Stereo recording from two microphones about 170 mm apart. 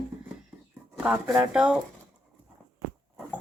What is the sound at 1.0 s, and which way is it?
Speech, 10° right (ahead or behind).